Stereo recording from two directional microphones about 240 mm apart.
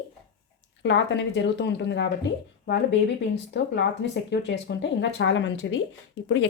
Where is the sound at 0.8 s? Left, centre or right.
Left.